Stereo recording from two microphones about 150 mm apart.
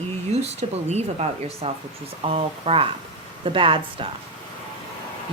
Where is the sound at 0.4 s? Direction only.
45° right (ahead or behind).